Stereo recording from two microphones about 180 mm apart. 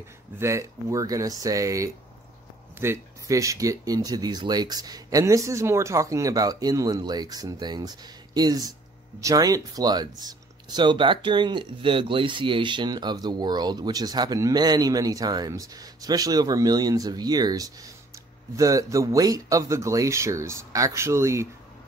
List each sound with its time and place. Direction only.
0.4 s speech: 15° right (ahead or behind)